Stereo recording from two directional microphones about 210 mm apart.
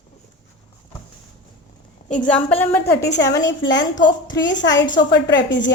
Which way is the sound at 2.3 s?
5° left (ahead or behind).